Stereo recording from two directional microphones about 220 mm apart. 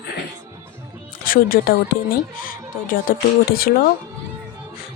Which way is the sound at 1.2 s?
40° left (ahead or behind).